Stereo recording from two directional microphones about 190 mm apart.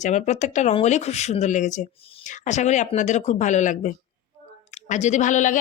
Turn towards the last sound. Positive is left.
turn(degrees=40)  # may be behind; listen again after turning